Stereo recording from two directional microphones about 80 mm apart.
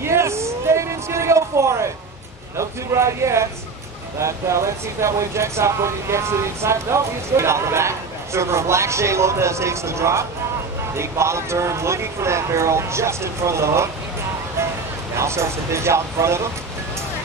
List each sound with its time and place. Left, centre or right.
0.0 s a sound: right
2.5 s speech: right
15.1 s speech: right